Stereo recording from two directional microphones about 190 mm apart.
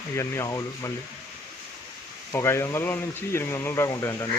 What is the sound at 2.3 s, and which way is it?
Speech, 15° left (ahead or behind).